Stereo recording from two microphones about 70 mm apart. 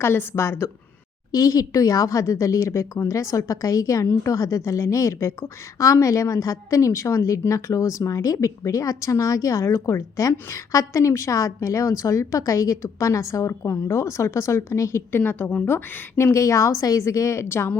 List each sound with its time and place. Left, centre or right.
0.0 s a woman's voice: left
1.3 s a woman's voice: left
15.2 s a woman's voice: left